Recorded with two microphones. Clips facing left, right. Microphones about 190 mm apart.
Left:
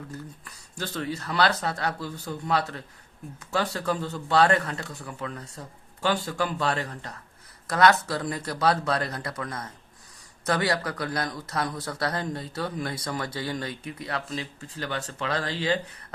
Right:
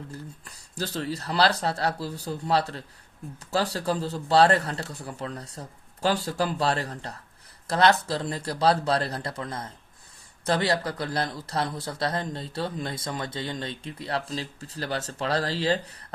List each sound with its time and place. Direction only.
0.1 s speech: 35° right (ahead or behind)